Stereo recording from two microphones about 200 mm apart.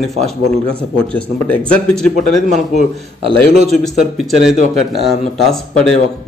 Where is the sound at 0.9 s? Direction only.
5° left (ahead or behind).